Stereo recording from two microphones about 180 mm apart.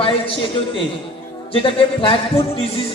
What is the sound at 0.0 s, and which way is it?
A woman's voice, 30° left (ahead or behind).